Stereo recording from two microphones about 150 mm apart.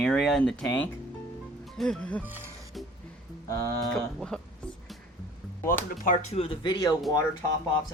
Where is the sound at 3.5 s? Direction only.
20° left (ahead or behind).